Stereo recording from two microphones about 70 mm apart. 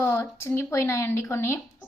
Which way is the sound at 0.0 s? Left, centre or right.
Left.